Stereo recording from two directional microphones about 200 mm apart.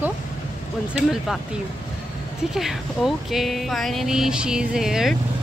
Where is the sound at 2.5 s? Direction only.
Centre (ahead or behind).